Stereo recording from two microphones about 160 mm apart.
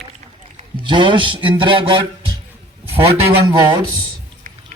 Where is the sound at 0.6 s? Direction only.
30° right (ahead or behind).